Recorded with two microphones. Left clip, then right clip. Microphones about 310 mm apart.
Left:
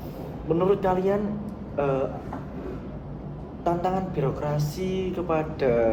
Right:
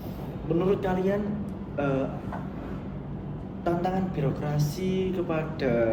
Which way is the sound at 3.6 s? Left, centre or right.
Centre.